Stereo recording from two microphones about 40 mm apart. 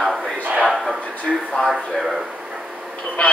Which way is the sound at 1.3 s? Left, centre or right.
Centre.